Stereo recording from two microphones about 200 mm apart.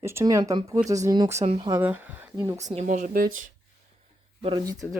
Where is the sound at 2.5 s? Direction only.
35° right (ahead or behind).